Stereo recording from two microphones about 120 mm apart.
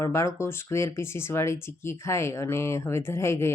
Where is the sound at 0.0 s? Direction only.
25° left (ahead or behind).